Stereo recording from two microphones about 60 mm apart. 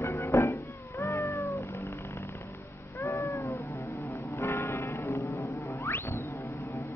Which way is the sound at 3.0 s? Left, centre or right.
Left.